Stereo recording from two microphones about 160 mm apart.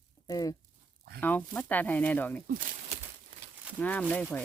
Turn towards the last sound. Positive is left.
turn(degrees=10)  # may be behind; listen again after turning